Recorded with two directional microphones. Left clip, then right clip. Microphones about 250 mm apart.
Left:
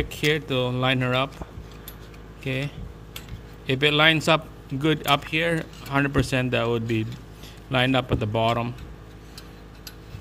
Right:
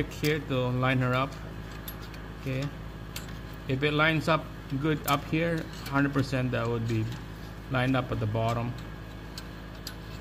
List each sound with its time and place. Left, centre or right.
0.2 s speech: left
2.4 s speech: left
3.6 s speech: left